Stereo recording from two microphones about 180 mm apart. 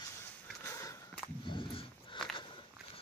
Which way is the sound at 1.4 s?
25° left (ahead or behind).